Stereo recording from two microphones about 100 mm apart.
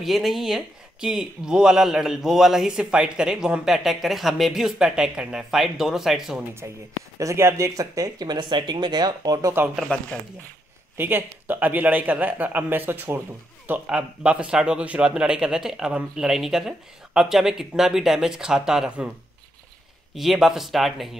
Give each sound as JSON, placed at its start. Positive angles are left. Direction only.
{"t": 0.0, "sound": "speech", "side_deg": 0}
{"t": 6.6, "sound": "speech", "side_deg": -25}
{"t": 9.9, "sound": "speech", "side_deg": 10}
{"t": 11.0, "sound": "a man's voice", "side_deg": -20}
{"t": 20.2, "sound": "speech", "side_deg": 0}